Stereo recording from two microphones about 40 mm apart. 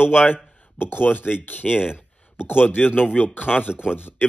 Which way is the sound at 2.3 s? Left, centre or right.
Left.